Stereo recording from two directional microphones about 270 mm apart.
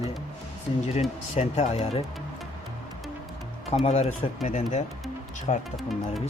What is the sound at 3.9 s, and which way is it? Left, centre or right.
Speech, left.